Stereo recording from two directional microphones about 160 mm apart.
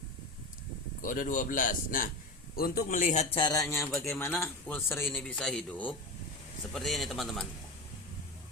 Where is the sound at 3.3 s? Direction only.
25° left (ahead or behind).